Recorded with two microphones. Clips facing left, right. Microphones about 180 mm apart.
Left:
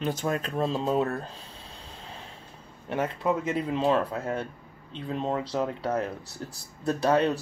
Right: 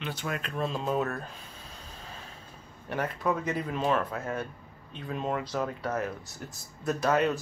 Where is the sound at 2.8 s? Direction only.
25° left (ahead or behind).